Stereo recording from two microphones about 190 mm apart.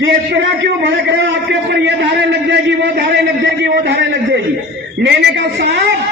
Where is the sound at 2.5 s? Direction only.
60° right (ahead or behind).